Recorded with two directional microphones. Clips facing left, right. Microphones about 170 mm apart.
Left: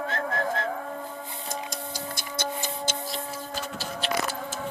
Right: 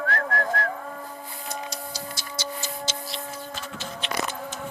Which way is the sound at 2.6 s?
50° left (ahead or behind).